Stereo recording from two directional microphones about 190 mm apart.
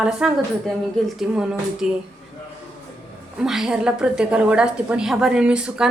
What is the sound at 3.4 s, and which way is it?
A woman's voice, 5° right (ahead or behind).